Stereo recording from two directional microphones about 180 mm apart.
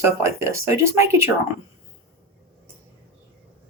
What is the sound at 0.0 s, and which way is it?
Speech, 15° right (ahead or behind).